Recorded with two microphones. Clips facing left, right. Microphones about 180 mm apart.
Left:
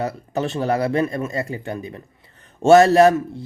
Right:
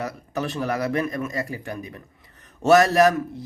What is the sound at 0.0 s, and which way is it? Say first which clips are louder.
Speech: left 4 dB; 25° left (ahead or behind).